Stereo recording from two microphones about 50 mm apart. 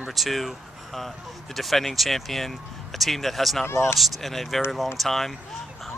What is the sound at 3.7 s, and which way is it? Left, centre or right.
Speech, left.